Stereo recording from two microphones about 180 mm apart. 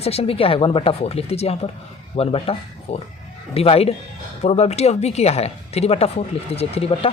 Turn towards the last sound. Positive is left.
turn(degrees=35)  # may be behind; listen again after turning